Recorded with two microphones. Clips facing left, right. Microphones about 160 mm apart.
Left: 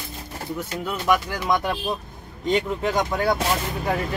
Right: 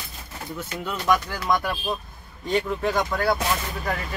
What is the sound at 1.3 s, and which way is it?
Speech, 20° left (ahead or behind).